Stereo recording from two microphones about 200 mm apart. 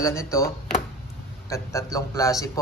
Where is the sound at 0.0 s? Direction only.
15° left (ahead or behind).